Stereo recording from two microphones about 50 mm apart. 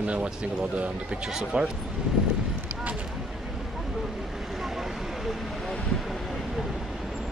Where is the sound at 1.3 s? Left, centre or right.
Centre.